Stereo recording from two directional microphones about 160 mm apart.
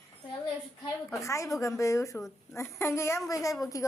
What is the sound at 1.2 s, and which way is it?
A child's voice, 20° left (ahead or behind).